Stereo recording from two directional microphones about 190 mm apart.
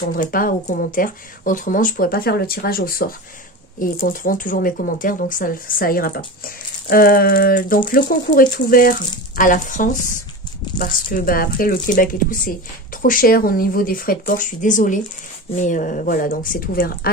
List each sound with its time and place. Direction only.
0.1 s speech: 50° left (ahead or behind)